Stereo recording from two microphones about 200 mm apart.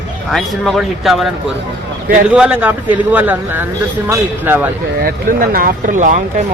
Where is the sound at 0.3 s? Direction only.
Centre (ahead or behind).